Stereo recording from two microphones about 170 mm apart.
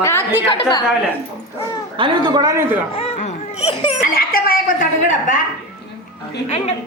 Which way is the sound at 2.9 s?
40° left (ahead or behind).